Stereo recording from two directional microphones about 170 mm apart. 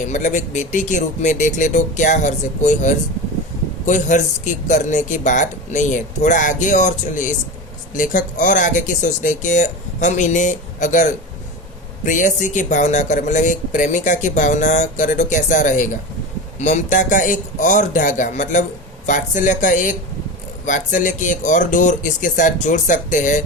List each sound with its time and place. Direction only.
0.1 s speech: 45° left (ahead or behind)